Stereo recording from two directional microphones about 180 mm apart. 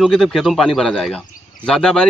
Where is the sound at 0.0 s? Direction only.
Centre (ahead or behind).